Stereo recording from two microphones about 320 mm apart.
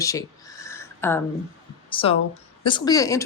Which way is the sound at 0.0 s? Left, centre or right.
Centre.